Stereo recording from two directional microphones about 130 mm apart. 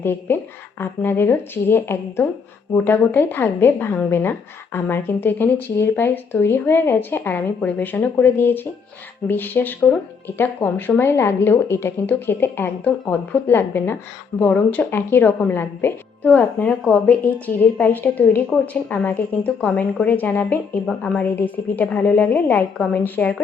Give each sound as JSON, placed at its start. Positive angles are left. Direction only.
{"t": 0.0, "sound": "speech", "side_deg": 15}